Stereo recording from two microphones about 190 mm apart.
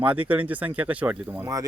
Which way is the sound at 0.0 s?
10° right (ahead or behind).